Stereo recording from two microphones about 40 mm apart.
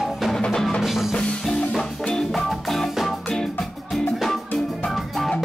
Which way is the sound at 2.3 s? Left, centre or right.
Centre.